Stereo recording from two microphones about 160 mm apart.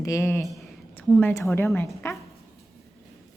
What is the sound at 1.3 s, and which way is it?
Speech, 15° left (ahead or behind).